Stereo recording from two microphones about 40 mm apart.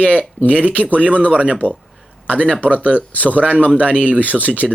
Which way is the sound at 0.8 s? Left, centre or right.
Right.